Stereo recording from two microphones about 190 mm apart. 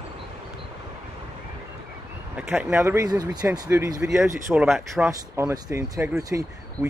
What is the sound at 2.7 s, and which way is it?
Speech, 15° right (ahead or behind).